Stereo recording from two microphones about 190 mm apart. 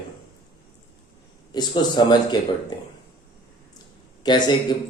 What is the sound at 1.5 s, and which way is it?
Speech, 20° left (ahead or behind).